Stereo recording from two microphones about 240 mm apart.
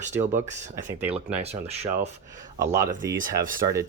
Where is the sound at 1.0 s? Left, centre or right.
Centre.